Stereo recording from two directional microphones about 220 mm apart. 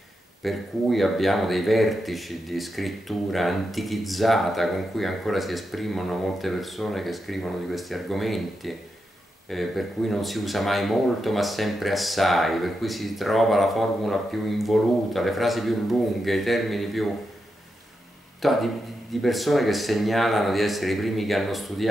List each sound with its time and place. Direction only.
0.4 s speech: centre (ahead or behind)
18.4 s speech: centre (ahead or behind)